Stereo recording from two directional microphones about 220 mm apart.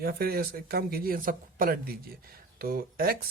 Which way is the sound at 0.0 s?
45° right (ahead or behind).